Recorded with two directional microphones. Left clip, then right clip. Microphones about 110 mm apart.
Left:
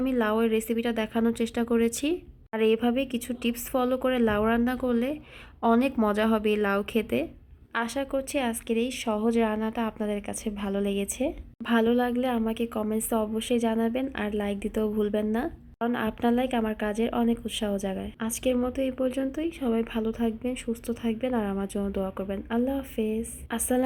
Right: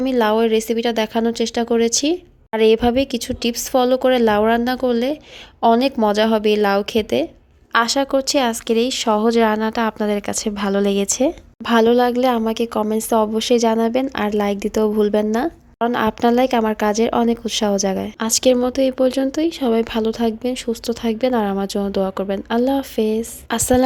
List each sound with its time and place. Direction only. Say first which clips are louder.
0.0 s a woman's voice: right 9 dB; 45° right (ahead or behind)
7.7 s a woman's voice: right 12 dB; 50° right (ahead or behind)
11.0 s a woman's voice: right 11 dB; 30° right (ahead or behind)
11.6 s a woman's voice: right 10 dB; 50° right (ahead or behind)
13.5 s a woman's voice: right 10 dB; 55° right (ahead or behind)
18.3 s a woman's voice: right 13 dB; 60° right (ahead or behind)
18.5 s a woman's voice: right 11 dB; 45° right (ahead or behind); by 23.8 s 65° right (ahead or behind)